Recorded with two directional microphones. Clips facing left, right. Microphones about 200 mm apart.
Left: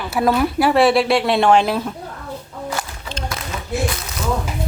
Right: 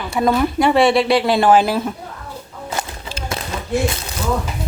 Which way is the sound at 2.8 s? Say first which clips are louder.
Right 2 dB; 25° right (ahead or behind).